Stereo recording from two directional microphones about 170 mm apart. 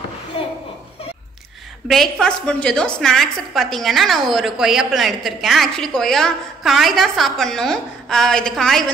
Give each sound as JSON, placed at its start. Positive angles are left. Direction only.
{"t": 0.3, "sound": "chuckle", "side_deg": 30}
{"t": 1.9, "sound": "a woman's voice", "side_deg": 0}